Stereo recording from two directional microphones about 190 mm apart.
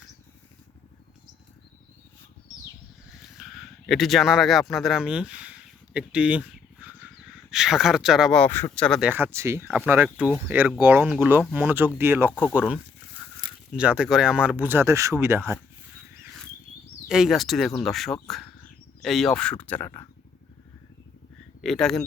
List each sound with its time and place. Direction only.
3.3 s speech: centre (ahead or behind)
13.4 s a sound: 25° right (ahead or behind)
13.7 s speech: 5° right (ahead or behind)
17.1 s speech: centre (ahead or behind); by 20.1 s 15° left (ahead or behind)
21.6 s speech: centre (ahead or behind)